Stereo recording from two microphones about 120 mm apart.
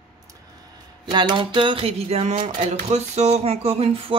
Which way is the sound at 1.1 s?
40° right (ahead or behind).